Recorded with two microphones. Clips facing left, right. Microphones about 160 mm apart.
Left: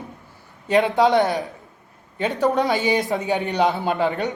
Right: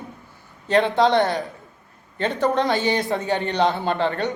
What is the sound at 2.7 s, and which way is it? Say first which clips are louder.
Speech: left 1 dB; 15° left (ahead or behind).